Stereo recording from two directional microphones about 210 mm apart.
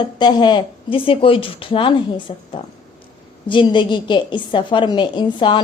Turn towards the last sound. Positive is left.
turn(degrees=20)  # may be behind; listen again after turning